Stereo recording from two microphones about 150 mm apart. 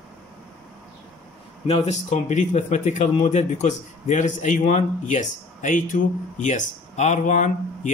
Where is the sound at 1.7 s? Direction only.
50° left (ahead or behind).